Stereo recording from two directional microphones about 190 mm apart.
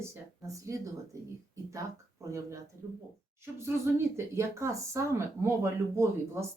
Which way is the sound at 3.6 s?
15° right (ahead or behind).